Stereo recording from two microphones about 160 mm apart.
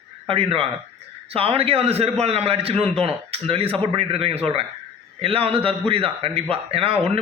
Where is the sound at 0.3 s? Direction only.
35° right (ahead or behind).